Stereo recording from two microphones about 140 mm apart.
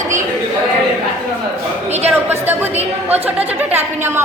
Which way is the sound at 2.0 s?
15° right (ahead or behind).